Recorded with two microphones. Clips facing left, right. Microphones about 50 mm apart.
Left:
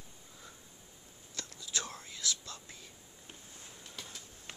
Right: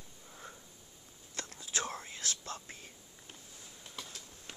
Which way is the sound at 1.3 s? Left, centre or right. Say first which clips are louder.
Right 2 dB; right.